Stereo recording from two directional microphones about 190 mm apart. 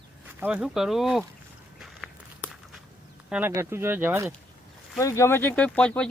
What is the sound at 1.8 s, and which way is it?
Walk, centre (ahead or behind).